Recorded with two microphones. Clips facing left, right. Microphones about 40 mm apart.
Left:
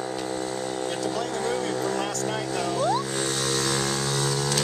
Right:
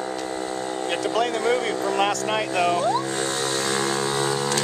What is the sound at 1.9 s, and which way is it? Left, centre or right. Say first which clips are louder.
Vehicle: right 6 dB; right.